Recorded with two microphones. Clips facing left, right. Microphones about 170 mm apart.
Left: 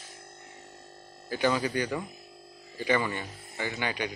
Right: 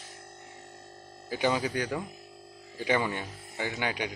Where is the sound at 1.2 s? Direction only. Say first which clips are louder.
Left 1 dB; 15° right (ahead or behind).